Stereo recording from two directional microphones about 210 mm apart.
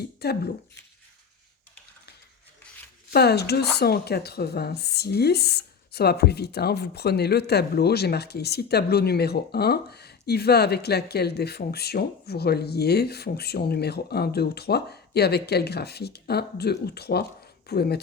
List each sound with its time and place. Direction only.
0.0 s speech: 50° left (ahead or behind)
3.1 s speech: 50° left (ahead or behind)